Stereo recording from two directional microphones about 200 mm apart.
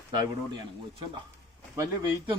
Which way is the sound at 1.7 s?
20° right (ahead or behind).